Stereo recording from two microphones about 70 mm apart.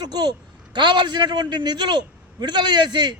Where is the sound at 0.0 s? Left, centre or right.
Right.